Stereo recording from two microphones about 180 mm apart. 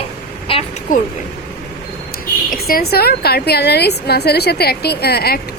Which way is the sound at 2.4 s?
55° left (ahead or behind).